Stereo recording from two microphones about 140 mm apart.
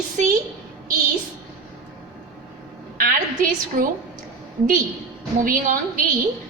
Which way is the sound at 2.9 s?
85° right.